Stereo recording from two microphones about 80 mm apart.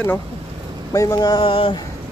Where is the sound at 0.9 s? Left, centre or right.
Left.